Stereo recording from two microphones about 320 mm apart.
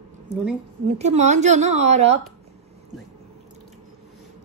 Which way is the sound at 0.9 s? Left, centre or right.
Right.